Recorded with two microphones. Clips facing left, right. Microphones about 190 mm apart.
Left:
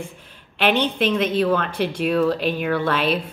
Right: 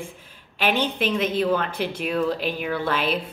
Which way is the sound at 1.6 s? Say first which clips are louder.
Left 3 dB; 60° left (ahead or behind).